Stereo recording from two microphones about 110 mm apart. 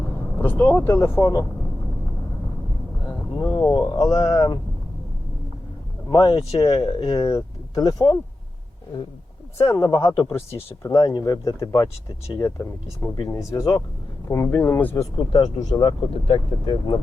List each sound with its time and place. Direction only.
0.3 s speech: 20° left (ahead or behind)
3.1 s speech: 35° left (ahead or behind)
6.1 s speech: 45° left (ahead or behind)
9.6 s speech: 35° left (ahead or behind)
14.3 s speech: 25° left (ahead or behind)
15.3 s speech: 35° left (ahead or behind)